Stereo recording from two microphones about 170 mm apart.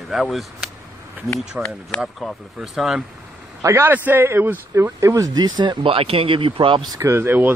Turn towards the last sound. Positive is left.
turn(degrees=-10)  # may be behind; listen again after turning